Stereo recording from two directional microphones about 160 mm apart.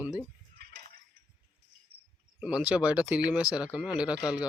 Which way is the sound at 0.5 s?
80° right.